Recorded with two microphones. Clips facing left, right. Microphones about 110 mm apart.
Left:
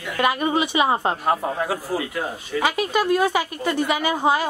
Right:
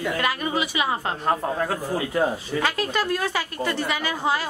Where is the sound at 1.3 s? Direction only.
10° left (ahead or behind).